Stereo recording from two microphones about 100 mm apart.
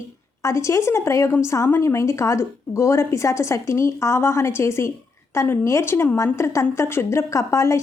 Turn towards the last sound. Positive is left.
turn(degrees=30)  # may be behind; listen again after turning